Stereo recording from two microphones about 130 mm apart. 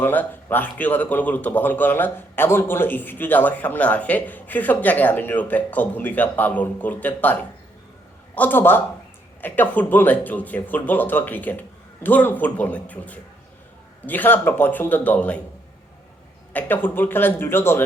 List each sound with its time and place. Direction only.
0.0 s speech: 15° left (ahead or behind)
8.4 s speech: 15° left (ahead or behind)
16.5 s speech: 15° left (ahead or behind)